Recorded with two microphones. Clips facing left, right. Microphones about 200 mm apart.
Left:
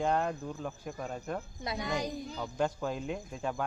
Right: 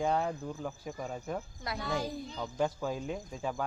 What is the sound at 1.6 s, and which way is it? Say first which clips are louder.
Speech: left 1 dB; 20° left (ahead or behind).